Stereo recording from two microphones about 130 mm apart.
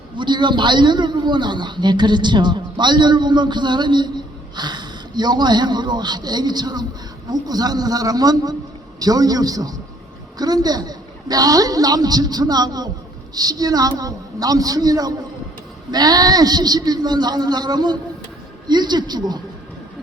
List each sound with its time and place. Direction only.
0.2 s a man's voice: 35° right (ahead or behind)